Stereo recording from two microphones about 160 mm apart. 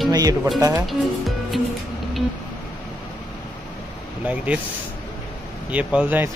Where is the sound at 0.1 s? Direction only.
25° right (ahead or behind).